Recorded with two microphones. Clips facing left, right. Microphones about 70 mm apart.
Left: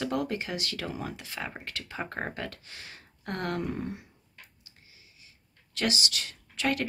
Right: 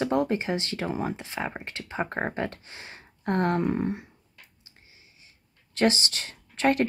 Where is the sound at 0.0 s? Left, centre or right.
Right.